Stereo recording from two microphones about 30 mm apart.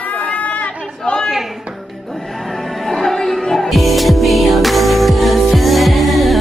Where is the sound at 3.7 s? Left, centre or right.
Centre.